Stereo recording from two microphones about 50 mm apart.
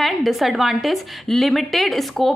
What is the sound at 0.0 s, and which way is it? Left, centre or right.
A woman's voice, centre.